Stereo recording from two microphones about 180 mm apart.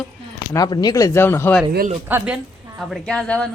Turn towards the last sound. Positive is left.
turn(degrees=5)  # may be behind; listen again after turning